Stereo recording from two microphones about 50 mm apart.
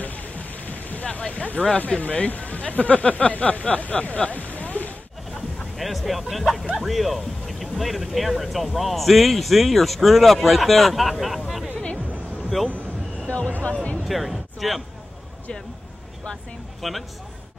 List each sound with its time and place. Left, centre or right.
0.0 s a sound: left
1.0 s speech: left
4.6 s a sound: left
5.8 s a man's voice: centre
13.3 s speech: left
14.0 s speech: centre
16.8 s a man's voice: centre